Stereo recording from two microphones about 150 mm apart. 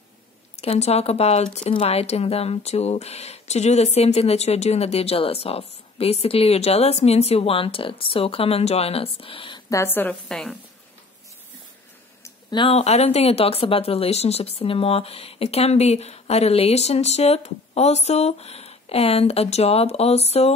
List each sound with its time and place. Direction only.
0.6 s speech: 45° left (ahead or behind)
9.7 s a woman's voice: 15° left (ahead or behind)
12.4 s speech: 30° left (ahead or behind)
12.7 s speech: 45° left (ahead or behind)